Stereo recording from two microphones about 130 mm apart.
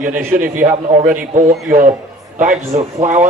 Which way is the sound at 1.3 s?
80° right.